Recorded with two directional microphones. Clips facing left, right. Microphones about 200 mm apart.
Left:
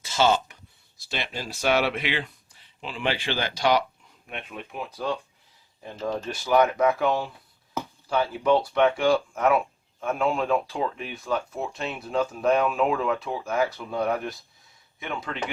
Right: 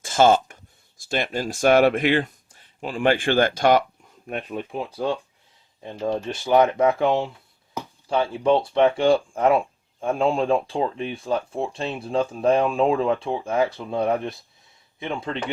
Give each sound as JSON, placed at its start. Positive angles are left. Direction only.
{"t": 0.0, "sound": "speech", "side_deg": -50}
{"t": 4.3, "sound": "speech", "side_deg": -40}
{"t": 6.2, "sound": "speech", "side_deg": -25}